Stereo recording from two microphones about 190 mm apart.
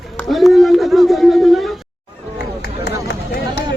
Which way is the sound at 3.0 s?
60° left (ahead or behind).